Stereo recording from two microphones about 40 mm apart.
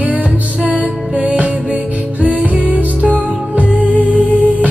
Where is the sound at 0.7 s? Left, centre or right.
Right.